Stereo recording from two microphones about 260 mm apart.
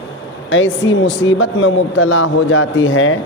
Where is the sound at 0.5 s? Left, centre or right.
Left.